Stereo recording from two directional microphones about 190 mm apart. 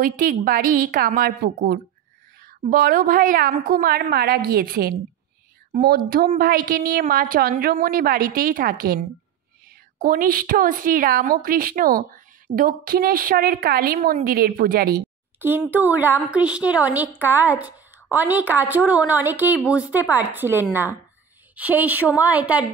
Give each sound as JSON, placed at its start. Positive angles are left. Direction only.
{"t": 0.0, "sound": "a woman's voice", "side_deg": -45}
{"t": 15.3, "sound": "a woman's voice", "side_deg": -10}